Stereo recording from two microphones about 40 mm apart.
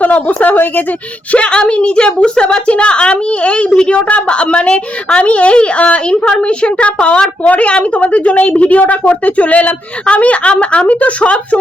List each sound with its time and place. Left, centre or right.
0.0 s a sound: left
0.5 s a woman's voice: left
1.3 s a woman's voice: left